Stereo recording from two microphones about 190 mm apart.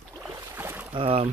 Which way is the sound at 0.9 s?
30° right (ahead or behind).